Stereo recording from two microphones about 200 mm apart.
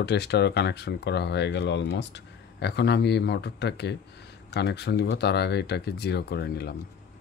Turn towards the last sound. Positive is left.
turn(degrees=50)  # may be behind; listen again after turning